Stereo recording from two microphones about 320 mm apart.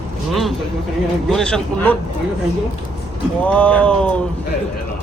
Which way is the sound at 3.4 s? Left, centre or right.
Centre.